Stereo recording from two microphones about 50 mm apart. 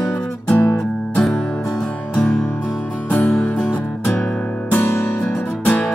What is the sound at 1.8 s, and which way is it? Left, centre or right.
Music, left.